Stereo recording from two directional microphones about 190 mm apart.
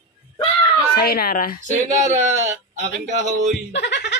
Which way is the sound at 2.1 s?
40° right (ahead or behind).